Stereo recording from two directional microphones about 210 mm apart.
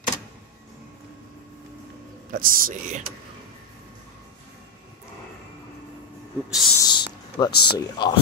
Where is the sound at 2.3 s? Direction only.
40° right (ahead or behind).